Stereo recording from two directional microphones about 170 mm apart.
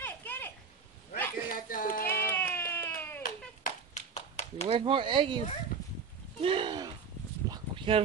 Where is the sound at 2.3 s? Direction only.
10° left (ahead or behind).